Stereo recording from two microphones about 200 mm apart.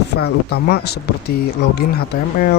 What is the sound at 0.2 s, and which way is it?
Speech, 55° left (ahead or behind).